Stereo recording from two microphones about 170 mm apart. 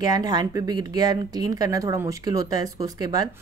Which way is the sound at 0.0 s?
20° right (ahead or behind).